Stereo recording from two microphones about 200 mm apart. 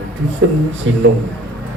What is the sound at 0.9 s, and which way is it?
Speech, 80° right.